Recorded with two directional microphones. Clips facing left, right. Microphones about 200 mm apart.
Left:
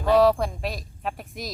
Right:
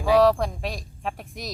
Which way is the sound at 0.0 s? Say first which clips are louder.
Even; centre (ahead or behind).